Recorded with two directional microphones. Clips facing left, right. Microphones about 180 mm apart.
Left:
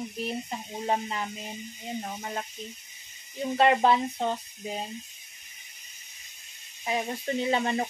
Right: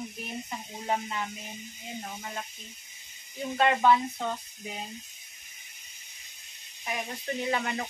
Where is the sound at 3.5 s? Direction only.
30° left (ahead or behind).